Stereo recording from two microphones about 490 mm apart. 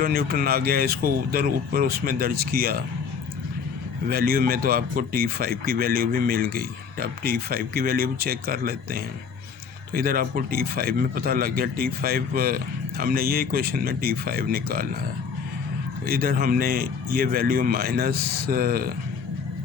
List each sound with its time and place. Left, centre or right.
0.0 s speech: centre
4.1 s speech: centre
16.0 s speech: centre